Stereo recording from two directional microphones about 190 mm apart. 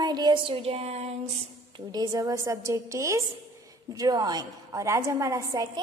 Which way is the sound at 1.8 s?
20° right (ahead or behind).